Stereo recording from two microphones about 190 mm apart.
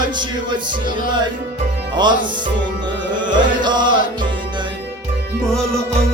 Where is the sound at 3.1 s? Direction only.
25° right (ahead or behind).